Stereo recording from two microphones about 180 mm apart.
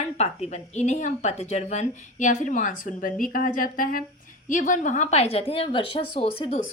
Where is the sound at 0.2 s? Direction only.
35° left (ahead or behind).